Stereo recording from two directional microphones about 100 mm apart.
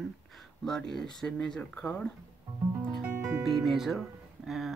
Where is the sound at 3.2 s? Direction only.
25° right (ahead or behind).